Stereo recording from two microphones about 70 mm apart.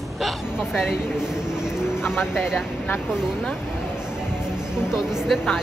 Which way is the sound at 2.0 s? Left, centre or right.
Left.